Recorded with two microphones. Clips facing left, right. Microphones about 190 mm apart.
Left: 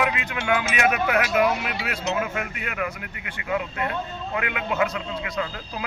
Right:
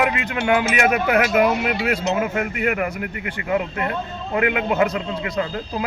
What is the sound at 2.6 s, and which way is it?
Speech, 50° right (ahead or behind).